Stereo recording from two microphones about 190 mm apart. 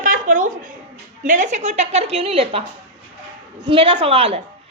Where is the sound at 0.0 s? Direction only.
45° right (ahead or behind).